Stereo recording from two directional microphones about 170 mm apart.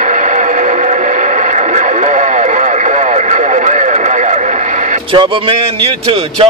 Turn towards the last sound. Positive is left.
turn(degrees=-35)  # may be behind; listen again after turning